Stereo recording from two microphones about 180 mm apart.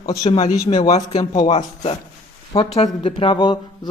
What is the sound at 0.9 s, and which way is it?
Speech, 35° left (ahead or behind).